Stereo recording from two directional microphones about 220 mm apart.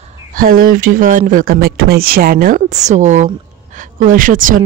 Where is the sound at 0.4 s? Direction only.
40° right (ahead or behind).